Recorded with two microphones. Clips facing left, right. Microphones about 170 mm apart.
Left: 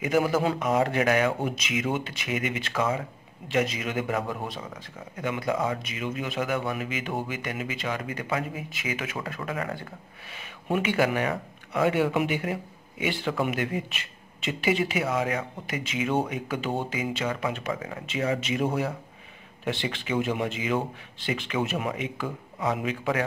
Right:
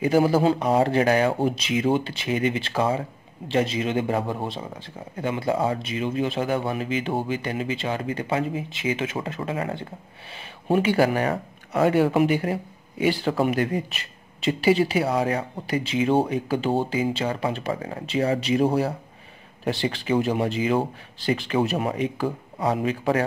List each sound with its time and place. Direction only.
0.0 s speech: 30° right (ahead or behind)